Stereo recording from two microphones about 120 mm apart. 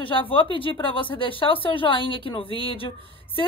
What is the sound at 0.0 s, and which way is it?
A woman's voice, 45° left (ahead or behind).